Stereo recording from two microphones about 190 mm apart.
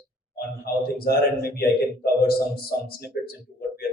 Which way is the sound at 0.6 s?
55° left (ahead or behind).